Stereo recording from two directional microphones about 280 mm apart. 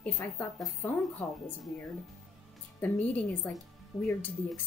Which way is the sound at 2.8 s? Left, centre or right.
Centre.